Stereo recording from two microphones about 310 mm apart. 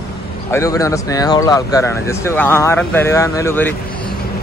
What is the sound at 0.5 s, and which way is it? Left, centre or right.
Speech, centre.